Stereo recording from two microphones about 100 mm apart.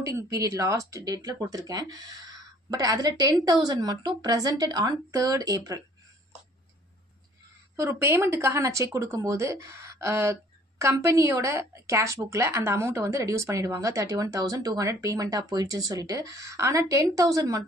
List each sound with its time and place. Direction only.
0.0 s speech: 35° right (ahead or behind)
7.7 s speech: 30° right (ahead or behind)